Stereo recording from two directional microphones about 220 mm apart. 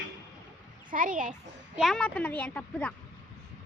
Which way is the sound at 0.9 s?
40° right (ahead or behind).